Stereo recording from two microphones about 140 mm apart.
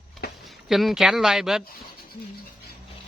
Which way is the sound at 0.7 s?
Centre (ahead or behind).